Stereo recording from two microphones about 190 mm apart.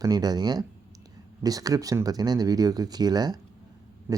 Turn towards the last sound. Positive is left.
turn(degrees=-10)  # may be behind; listen again after turning